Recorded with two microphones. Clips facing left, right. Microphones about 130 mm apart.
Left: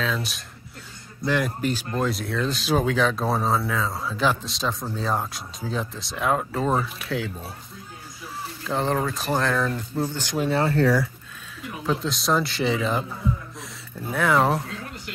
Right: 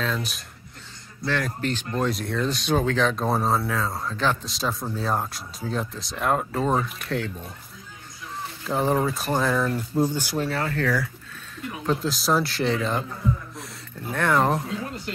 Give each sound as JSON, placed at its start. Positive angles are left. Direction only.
{"t": 0.0, "sound": "speech", "side_deg": 0}
{"t": 1.2, "sound": "speech", "side_deg": 10}
{"t": 8.6, "sound": "speech", "side_deg": -5}
{"t": 10.5, "sound": "speech", "side_deg": 30}
{"t": 11.8, "sound": "speech", "side_deg": 0}
{"t": 14.7, "sound": "speech", "side_deg": -25}